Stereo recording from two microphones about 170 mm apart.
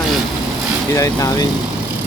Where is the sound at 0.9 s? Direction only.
20° left (ahead or behind).